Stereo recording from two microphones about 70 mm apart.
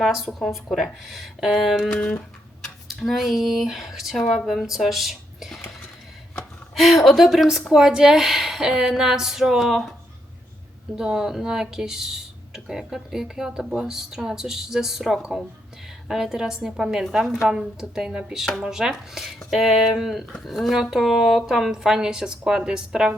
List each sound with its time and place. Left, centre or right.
0.0 s speech: centre
1.8 s a sound: centre
2.8 s speech: centre
6.7 s speech: centre
10.9 s speech: centre